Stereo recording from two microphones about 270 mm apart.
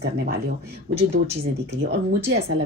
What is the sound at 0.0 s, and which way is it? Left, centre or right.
Speech, right.